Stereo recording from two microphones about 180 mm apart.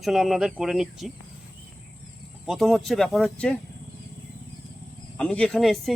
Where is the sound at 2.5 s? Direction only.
Centre (ahead or behind).